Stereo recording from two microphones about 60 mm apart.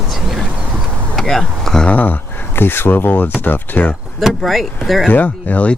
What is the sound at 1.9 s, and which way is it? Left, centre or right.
Speech, left.